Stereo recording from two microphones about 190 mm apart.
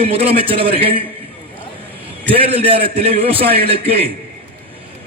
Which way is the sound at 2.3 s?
30° right (ahead or behind).